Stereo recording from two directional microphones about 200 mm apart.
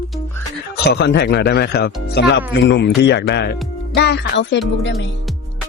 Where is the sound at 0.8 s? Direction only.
55° left (ahead or behind).